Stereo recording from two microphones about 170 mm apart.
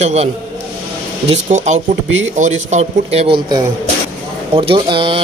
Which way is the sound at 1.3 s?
45° right (ahead or behind).